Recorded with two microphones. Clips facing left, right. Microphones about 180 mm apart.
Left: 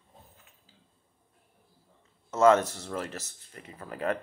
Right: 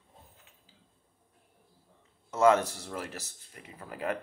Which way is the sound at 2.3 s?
15° right (ahead or behind).